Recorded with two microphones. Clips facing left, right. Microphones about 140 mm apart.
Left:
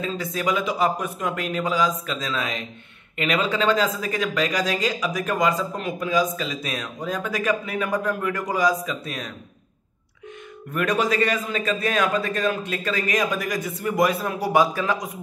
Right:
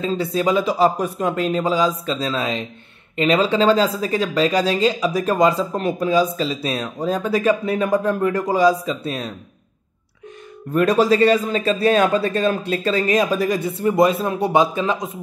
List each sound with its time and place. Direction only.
0.0 s a man's voice: 30° right (ahead or behind)
10.7 s a man's voice: 30° right (ahead or behind)